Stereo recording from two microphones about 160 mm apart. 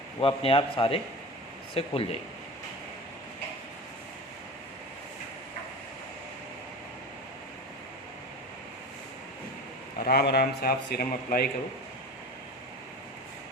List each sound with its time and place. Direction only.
0.2 s a man's voice: 35° left (ahead or behind)
10.0 s speech: 80° left